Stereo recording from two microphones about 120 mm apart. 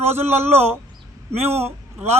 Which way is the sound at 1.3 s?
60° right (ahead or behind).